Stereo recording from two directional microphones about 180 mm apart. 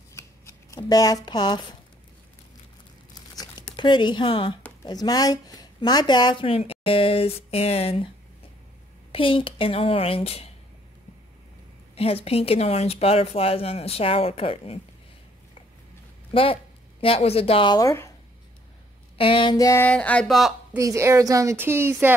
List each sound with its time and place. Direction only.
0.1 s scissors: 15° left (ahead or behind)
3.2 s crumpling: 25° left (ahead or behind)
4.8 s speech: 20° left (ahead or behind)
9.1 s speech: 30° left (ahead or behind)
11.9 s speech: 35° left (ahead or behind)
16.3 s a woman's voice: 30° left (ahead or behind)
19.1 s speech: 30° left (ahead or behind); by 20.5 s centre (ahead or behind)
20.7 s a woman's voice: 15° right (ahead or behind)